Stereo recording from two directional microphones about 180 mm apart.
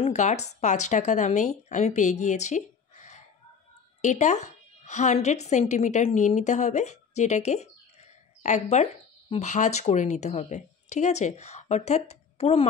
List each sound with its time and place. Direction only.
0.0 s a woman's voice: 40° left (ahead or behind)